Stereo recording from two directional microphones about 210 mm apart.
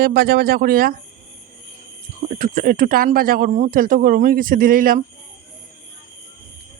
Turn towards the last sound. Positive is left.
turn(degrees=-40)  # may be behind; listen again after turning